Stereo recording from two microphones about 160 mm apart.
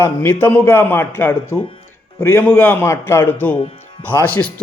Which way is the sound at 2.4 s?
10° left (ahead or behind).